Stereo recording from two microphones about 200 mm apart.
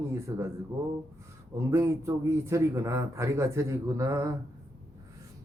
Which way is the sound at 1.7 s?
15° right (ahead or behind).